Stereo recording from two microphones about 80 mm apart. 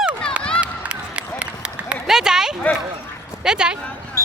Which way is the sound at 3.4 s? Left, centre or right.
Centre.